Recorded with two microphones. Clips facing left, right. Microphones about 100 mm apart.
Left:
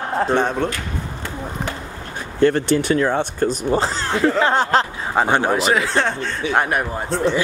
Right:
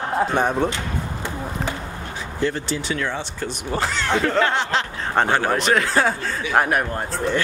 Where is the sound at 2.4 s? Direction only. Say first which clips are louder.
Left 8 dB; 60° left (ahead or behind).